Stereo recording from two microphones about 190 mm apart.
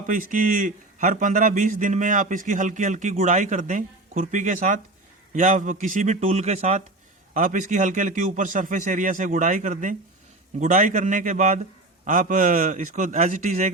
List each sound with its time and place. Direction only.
0.1 s a man's voice: 45° right (ahead or behind)